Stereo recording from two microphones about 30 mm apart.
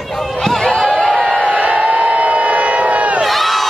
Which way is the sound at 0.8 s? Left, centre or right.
Left.